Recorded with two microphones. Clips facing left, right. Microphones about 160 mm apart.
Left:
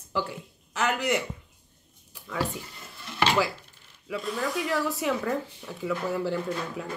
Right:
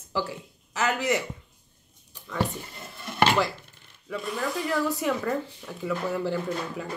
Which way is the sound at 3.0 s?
50° right (ahead or behind).